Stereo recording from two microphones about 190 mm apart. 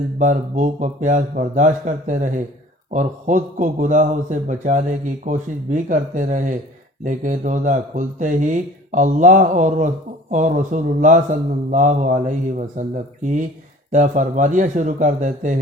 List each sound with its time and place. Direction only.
0.2 s a man's voice: 40° right (ahead or behind)